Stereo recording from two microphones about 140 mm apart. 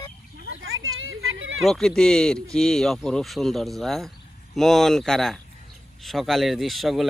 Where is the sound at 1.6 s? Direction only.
5° left (ahead or behind).